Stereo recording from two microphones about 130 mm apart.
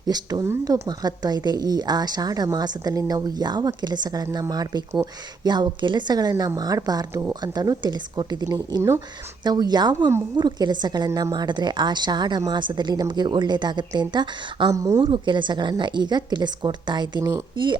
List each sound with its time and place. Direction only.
0.1 s a woman's voice: 30° right (ahead or behind)